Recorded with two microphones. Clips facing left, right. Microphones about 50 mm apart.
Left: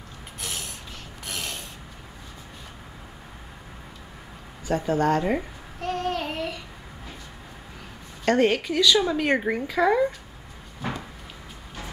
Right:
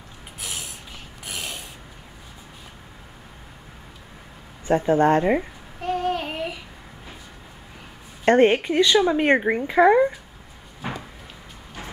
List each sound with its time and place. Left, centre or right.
0.4 s a sound: centre
1.2 s mechanisms: centre
4.6 s speech: right
5.8 s child singing: centre
8.3 s speech: right
10.8 s a sound: centre